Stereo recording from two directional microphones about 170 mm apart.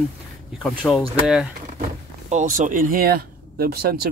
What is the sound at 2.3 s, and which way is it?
Speech, 50° right (ahead or behind).